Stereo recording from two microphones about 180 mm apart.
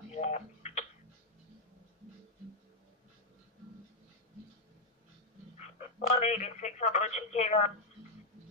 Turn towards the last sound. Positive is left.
turn(degrees=40)  # may be behind; listen again after turning